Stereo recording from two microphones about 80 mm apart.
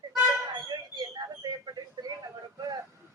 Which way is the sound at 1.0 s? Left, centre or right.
Right.